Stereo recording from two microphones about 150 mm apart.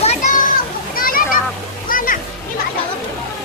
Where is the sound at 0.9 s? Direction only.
70° left (ahead or behind).